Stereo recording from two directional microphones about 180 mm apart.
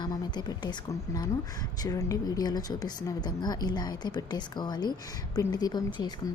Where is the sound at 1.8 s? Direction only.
20° left (ahead or behind).